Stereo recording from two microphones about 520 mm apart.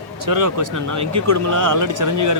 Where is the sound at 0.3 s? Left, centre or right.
Right.